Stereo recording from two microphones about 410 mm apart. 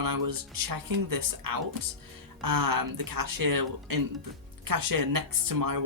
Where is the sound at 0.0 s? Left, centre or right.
Right.